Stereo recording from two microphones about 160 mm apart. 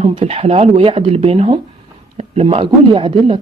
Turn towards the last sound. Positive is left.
turn(degrees=-30)  # may be behind; listen again after turning